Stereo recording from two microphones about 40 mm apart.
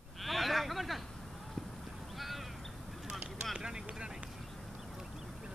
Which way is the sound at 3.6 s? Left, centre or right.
Centre.